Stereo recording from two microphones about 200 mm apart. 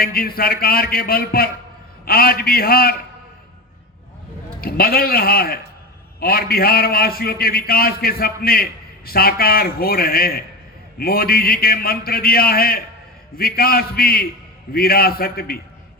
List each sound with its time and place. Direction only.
0.0 s a man's voice: 50° left (ahead or behind)
4.6 s a man's voice: 50° left (ahead or behind)